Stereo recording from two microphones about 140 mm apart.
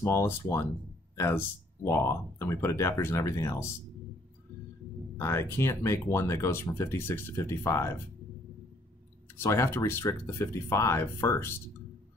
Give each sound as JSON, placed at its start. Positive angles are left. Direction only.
{"t": 0.0, "sound": "speech", "side_deg": 20}
{"t": 5.1, "sound": "speech", "side_deg": 20}
{"t": 9.4, "sound": "speech", "side_deg": 20}